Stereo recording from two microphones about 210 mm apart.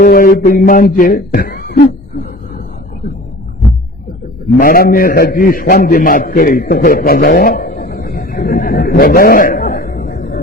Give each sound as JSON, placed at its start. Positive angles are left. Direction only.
{"t": 0.0, "sound": "speech", "side_deg": 45}
{"t": 4.5, "sound": "a man's voice", "side_deg": 45}